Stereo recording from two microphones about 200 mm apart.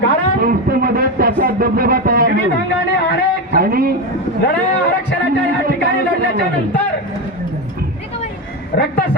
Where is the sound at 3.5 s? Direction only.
45° right (ahead or behind).